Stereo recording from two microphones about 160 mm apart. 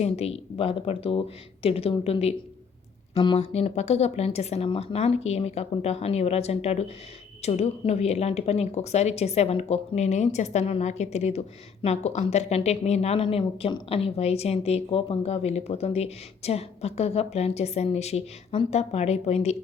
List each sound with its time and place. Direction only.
0.0 s a woman's voice: 40° left (ahead or behind)